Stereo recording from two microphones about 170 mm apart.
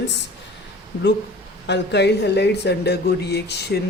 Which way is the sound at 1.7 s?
85° left.